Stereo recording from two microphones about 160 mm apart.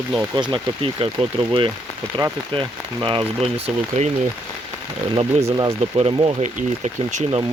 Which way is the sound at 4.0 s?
45° right (ahead or behind).